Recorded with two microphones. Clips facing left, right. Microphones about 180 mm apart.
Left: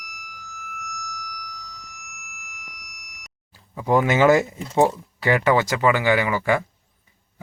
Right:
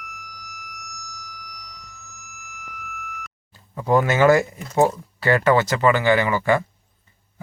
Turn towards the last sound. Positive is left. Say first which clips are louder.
# right 2 dB
turn(degrees=10)  # may be behind; listen again after turning